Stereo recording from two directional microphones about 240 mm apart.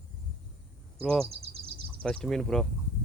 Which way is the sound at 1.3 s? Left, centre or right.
Right.